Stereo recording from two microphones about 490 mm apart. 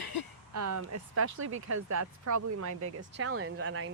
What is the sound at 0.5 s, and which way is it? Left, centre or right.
Speech, right.